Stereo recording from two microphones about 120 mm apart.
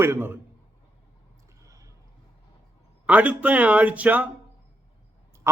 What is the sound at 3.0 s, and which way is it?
A man's voice, 10° right (ahead or behind).